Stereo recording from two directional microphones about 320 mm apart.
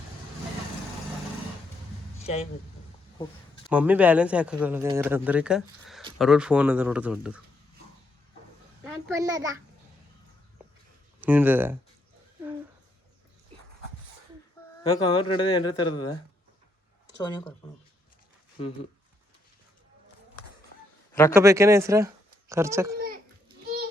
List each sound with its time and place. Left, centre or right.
2.2 s speech: centre
3.7 s speech: centre
8.8 s a child's voice: centre
11.2 s speech: centre
14.8 s speech: centre
21.1 s a sound: centre
21.3 s speech: centre